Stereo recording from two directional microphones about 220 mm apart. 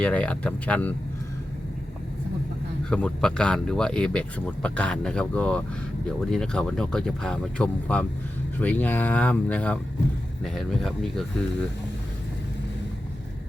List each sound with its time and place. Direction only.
0.0 s speech: 5° left (ahead or behind)
2.9 s speech: 5° left (ahead or behind)